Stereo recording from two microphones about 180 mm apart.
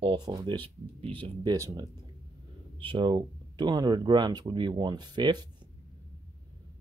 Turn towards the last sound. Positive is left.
turn(degrees=-25)  # may be behind; listen again after turning